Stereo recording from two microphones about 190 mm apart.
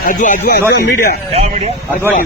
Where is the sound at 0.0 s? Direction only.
45° left (ahead or behind).